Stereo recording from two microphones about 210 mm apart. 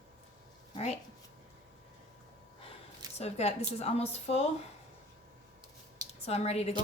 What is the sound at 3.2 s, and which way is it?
A woman's voice, 30° left (ahead or behind).